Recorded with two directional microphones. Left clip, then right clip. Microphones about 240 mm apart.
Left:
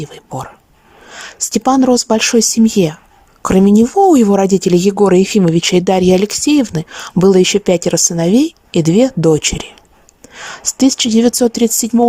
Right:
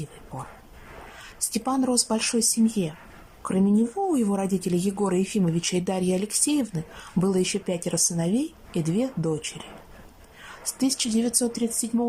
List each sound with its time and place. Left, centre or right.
1.1 s speech: left